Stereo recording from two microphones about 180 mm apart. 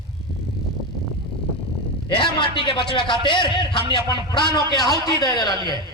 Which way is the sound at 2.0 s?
25° left (ahead or behind).